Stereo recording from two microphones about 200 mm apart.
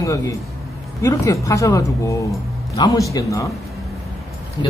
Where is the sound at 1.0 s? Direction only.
15° left (ahead or behind).